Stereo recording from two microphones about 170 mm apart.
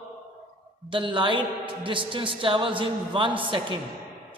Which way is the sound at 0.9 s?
30° right (ahead or behind).